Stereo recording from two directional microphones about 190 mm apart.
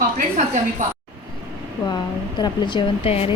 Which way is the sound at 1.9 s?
20° left (ahead or behind).